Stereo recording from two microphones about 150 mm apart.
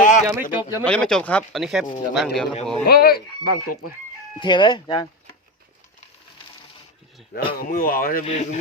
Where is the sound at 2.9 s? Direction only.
90° left.